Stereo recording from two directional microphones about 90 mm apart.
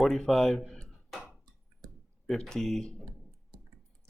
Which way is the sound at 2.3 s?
5° left (ahead or behind).